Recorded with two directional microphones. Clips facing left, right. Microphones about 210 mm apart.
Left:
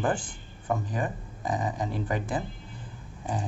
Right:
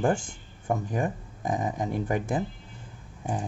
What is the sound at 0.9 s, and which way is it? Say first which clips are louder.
A man's voice: right 3 dB; 50° right (ahead or behind).